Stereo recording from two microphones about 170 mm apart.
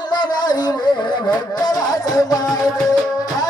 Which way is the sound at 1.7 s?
25° left (ahead or behind).